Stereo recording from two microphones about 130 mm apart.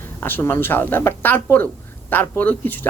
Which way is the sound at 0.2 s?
15° left (ahead or behind).